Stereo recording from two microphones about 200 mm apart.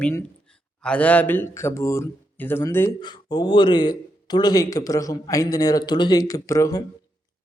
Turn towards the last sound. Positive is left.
turn(degrees=15)  # may be behind; listen again after turning